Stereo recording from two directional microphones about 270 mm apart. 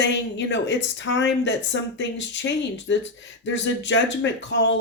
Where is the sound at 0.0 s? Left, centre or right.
Left.